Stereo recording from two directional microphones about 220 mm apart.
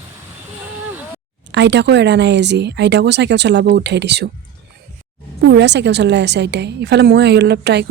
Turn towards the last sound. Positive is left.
turn(degrees=-50)  # may be behind; listen again after turning